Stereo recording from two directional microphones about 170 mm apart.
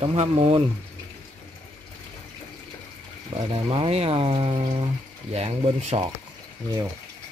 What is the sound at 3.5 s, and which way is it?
Speech, 30° right (ahead or behind).